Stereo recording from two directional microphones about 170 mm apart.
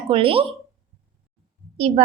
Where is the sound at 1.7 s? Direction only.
35° right (ahead or behind).